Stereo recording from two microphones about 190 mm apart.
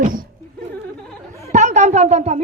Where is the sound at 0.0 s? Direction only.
45° right (ahead or behind).